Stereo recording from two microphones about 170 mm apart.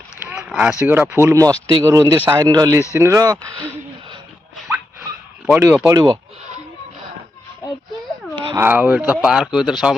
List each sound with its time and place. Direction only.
0.3 s speech: 10° right (ahead or behind)
5.5 s speech: 10° right (ahead or behind)
5.8 s speech: 25° right (ahead or behind)
8.5 s speech: 10° right (ahead or behind)